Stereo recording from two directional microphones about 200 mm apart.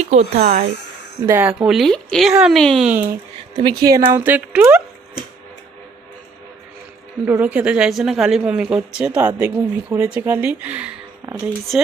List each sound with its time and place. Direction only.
0.0 s speech: 35° right (ahead or behind)
0.4 s speech: 50° right (ahead or behind)
1.3 s speech: 10° right (ahead or behind)
3.5 s speech: 25° right (ahead or behind)
7.3 s speech: 10° right (ahead or behind)